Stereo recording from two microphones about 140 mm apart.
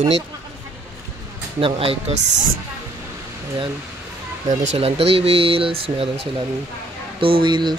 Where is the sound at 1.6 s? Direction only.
45° right (ahead or behind).